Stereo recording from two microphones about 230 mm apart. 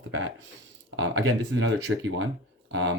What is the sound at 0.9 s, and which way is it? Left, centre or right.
Speech, right.